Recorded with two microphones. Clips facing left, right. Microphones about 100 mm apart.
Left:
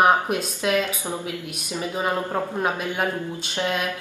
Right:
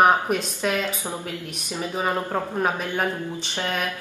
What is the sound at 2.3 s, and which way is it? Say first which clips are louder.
Speech: even; centre (ahead or behind).